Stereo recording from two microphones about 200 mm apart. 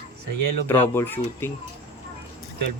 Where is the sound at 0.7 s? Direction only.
10° left (ahead or behind).